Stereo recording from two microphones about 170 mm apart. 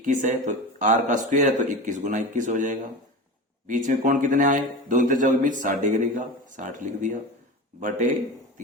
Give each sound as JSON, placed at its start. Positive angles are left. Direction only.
{"t": 0.0, "sound": "speech", "side_deg": -45}